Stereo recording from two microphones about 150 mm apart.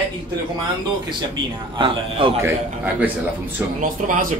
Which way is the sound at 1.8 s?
35° right (ahead or behind).